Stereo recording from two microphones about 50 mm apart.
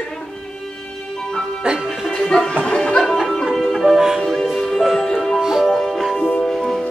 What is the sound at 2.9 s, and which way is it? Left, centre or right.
Music, centre.